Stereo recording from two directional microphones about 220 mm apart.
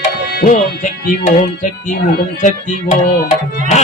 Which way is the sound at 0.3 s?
40° left (ahead or behind).